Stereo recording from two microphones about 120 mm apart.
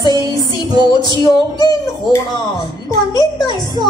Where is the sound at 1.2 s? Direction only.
30° left (ahead or behind).